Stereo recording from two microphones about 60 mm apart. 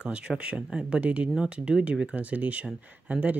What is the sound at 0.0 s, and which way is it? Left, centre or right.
Speech, centre.